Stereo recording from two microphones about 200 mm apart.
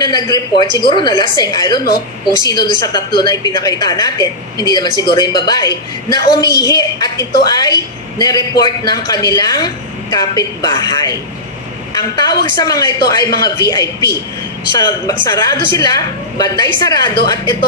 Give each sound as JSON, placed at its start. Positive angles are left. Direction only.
{"t": 0.0, "sound": "a woman's voice", "side_deg": 20}
{"t": 12.5, "sound": "a woman's voice", "side_deg": 20}